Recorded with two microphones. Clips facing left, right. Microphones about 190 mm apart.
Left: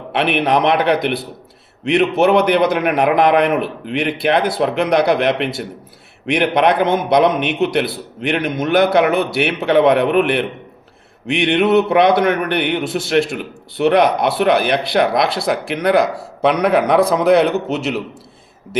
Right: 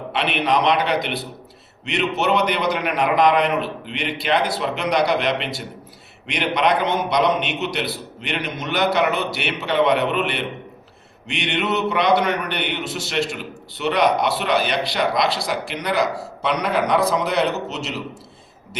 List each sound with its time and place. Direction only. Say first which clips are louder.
0.1 s a man's voice: left 5 dB; 55° left (ahead or behind)